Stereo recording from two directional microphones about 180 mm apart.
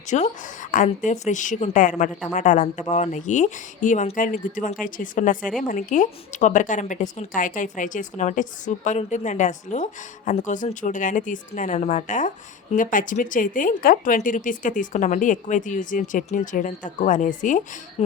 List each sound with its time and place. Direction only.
0.1 s a woman's voice: 45° left (ahead or behind)